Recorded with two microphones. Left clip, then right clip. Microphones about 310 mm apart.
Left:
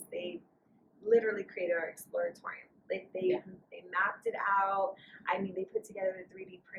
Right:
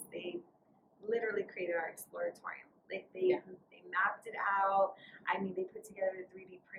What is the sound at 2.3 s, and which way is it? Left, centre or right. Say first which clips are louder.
Speech: left 2 dB; centre.